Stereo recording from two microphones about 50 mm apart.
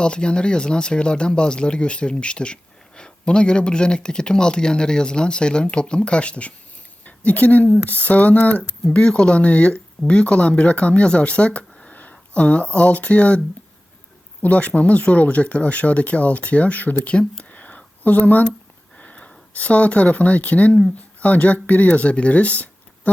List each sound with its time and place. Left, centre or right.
0.0 s speech: centre
9.0 s speech: centre
14.4 s speech: left
17.4 s a sound: left
18.9 s sniff: left
19.5 s speech: left